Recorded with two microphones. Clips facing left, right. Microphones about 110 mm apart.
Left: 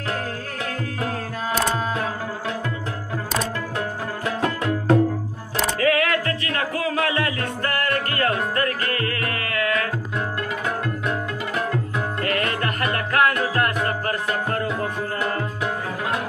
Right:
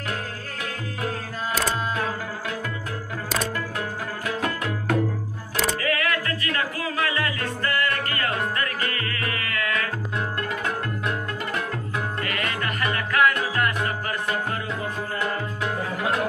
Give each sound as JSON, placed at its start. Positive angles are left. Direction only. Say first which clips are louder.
{"t": 4.4, "sound": "music", "louder": "left 6 dB", "side_deg": 25}
{"t": 5.8, "sound": "music", "louder": "left 5 dB", "side_deg": 80}
{"t": 7.0, "sound": "music", "louder": "even", "side_deg": 65}
{"t": 12.2, "sound": "music", "louder": "left 4 dB", "side_deg": 45}